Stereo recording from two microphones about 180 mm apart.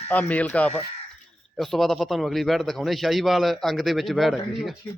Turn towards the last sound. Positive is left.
turn(degrees=0)  # may be behind; listen again after turning